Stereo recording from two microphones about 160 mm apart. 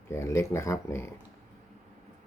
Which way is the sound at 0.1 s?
15° left (ahead or behind).